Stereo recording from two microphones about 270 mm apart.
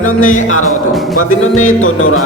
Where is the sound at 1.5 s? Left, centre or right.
Left.